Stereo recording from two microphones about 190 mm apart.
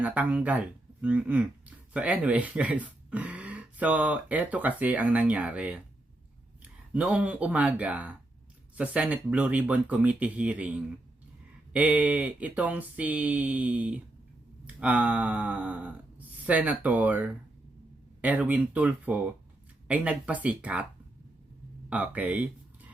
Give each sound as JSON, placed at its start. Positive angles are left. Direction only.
{"t": 0.0, "sound": "speech", "side_deg": -5}
{"t": 21.8, "sound": "speech", "side_deg": -5}